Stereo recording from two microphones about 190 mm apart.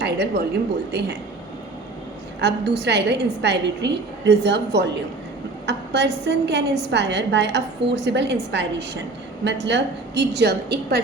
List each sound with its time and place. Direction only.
0.0 s a woman's voice: 60° right (ahead or behind)
2.4 s a woman's voice: 60° right (ahead or behind)